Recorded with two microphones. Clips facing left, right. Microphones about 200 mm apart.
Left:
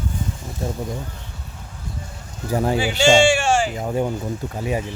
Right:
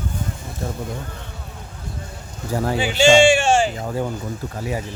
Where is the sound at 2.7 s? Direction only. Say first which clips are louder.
Right 1 dB; 20° right (ahead or behind).